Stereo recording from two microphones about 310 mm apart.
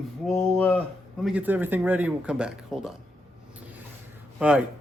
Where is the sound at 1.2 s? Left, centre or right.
Centre.